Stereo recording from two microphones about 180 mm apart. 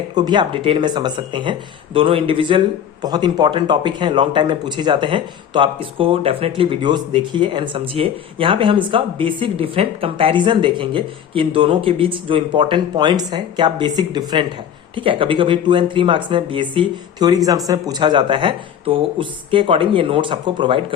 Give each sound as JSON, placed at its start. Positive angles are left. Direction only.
{"t": 0.1, "sound": "a man's voice", "side_deg": -25}